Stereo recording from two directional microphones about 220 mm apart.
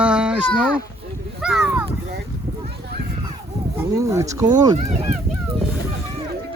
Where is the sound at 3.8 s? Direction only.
15° right (ahead or behind).